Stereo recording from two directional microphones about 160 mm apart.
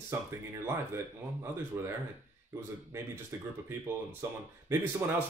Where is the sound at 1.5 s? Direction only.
15° right (ahead or behind).